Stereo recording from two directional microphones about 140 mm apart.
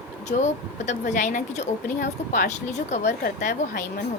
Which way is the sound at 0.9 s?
60° left (ahead or behind).